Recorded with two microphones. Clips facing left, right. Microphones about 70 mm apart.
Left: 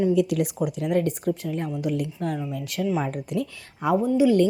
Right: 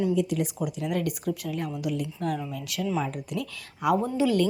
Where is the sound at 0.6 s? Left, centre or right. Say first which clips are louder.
Left 5 dB; left.